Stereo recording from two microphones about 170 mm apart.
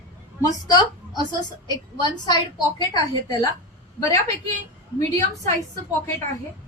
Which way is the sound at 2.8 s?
25° left (ahead or behind).